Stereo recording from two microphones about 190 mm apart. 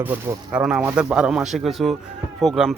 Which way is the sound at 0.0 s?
10° right (ahead or behind).